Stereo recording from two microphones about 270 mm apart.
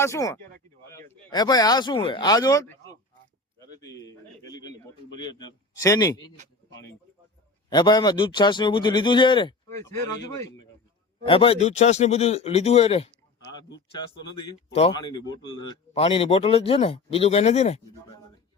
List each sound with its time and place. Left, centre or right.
0.0 s a man's voice: centre
7.7 s a man's voice: centre
13.7 s speech: left
14.7 s a man's voice: left